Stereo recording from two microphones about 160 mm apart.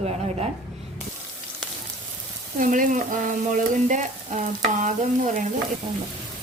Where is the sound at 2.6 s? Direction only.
55° right (ahead or behind).